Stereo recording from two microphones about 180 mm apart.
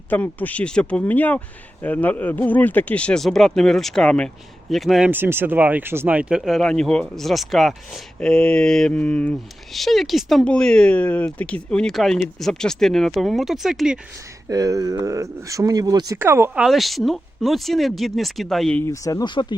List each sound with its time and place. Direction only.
0.1 s speech: 10° left (ahead or behind)
14.4 s speech: 20° right (ahead or behind)
16.6 s speech: centre (ahead or behind)
18.9 s speech: 20° left (ahead or behind)